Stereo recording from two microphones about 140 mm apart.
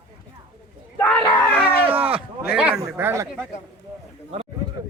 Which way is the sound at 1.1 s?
10° left (ahead or behind).